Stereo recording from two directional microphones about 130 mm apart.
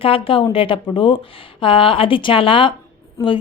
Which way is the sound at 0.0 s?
45° left (ahead or behind).